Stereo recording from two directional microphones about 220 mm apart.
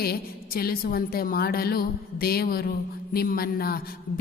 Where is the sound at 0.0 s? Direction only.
45° left (ahead or behind).